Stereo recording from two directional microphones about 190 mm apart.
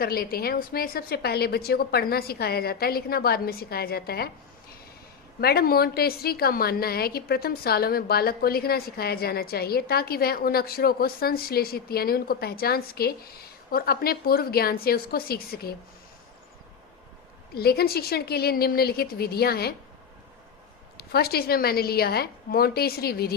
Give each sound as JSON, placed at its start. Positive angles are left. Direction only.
{"t": 0.0, "sound": "a woman's voice", "side_deg": 50}
{"t": 5.4, "sound": "a woman's voice", "side_deg": 55}
{"t": 17.5, "sound": "a woman's voice", "side_deg": 55}
{"t": 21.1, "sound": "a woman's voice", "side_deg": 55}